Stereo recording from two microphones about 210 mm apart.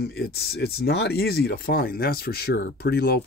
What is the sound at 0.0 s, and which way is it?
Speech, 50° left (ahead or behind).